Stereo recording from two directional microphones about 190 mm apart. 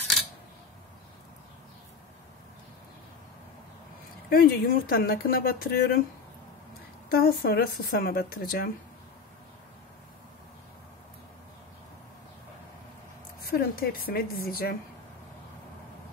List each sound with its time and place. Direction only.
4.3 s speech: 50° left (ahead or behind)
7.1 s speech: 50° left (ahead or behind)
13.4 s speech: 50° left (ahead or behind)